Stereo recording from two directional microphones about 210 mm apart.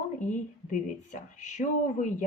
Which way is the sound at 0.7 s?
35° left (ahead or behind).